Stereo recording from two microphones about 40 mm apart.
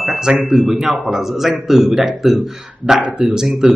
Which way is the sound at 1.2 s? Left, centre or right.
Centre.